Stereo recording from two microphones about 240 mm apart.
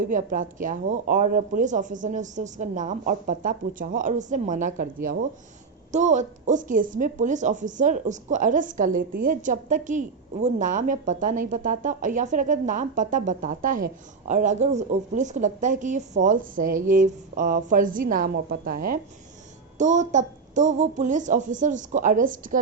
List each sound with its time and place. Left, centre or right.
0.0 s a woman's voice: right
5.9 s a woman's voice: right